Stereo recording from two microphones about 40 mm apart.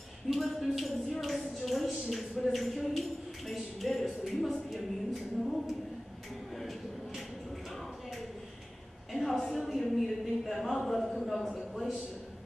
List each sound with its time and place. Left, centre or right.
0.3 s speech: centre
9.1 s a sound: centre
9.7 s a man's voice: centre